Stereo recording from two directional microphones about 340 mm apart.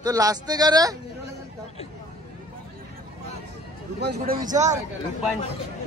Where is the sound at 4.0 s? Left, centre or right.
Right.